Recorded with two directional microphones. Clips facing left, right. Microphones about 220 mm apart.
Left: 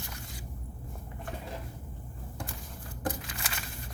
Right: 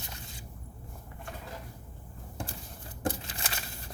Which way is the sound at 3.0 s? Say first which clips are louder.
Right 2 dB; 25° right (ahead or behind).